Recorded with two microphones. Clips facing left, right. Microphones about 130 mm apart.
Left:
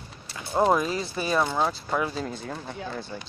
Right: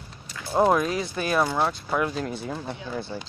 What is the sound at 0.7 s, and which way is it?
Speech, centre (ahead or behind).